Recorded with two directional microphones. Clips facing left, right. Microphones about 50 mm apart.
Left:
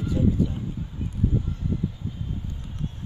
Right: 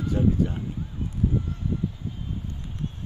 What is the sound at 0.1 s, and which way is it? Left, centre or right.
Speech, right.